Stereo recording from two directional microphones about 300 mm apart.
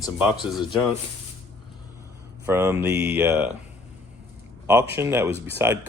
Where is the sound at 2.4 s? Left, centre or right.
Centre.